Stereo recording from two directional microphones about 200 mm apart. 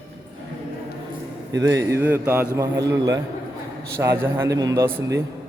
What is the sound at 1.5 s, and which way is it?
A man's voice, 15° right (ahead or behind).